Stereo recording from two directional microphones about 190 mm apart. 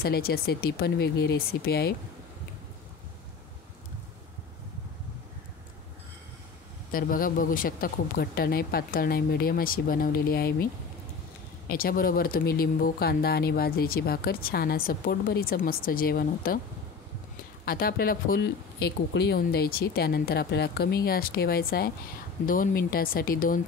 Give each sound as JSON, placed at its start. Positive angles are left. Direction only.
{"t": 0.0, "sound": "speech", "side_deg": 55}
{"t": 6.9, "sound": "speech", "side_deg": 50}
{"t": 11.7, "sound": "speech", "side_deg": 50}
{"t": 17.6, "sound": "speech", "side_deg": 50}